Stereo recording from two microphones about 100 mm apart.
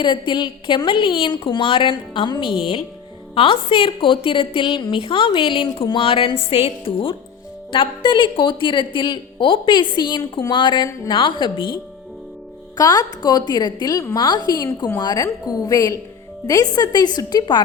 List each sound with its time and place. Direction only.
0.0 s a woman's voice: 55° left (ahead or behind)
12.7 s a woman's voice: 35° left (ahead or behind)